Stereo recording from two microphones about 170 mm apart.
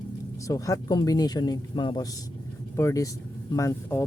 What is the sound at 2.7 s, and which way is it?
Speech, 15° left (ahead or behind).